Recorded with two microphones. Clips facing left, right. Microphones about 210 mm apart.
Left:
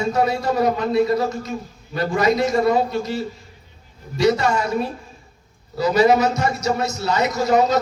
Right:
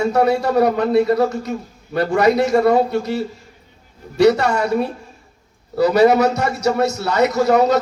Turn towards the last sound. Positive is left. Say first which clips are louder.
# right 3 dB
turn(degrees=-65)  # may be behind; listen again after turning